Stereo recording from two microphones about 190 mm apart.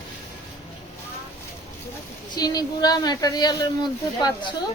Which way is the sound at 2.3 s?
20° left (ahead or behind).